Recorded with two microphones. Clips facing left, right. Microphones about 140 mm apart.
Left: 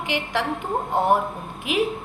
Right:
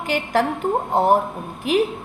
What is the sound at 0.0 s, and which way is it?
A woman's voice, 45° right (ahead or behind).